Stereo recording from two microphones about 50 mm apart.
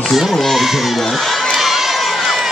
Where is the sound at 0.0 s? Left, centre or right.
Centre.